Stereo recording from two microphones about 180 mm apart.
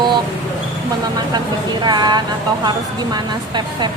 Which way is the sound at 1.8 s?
25° right (ahead or behind).